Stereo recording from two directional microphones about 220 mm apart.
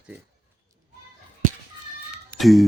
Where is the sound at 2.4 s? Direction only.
Centre (ahead or behind).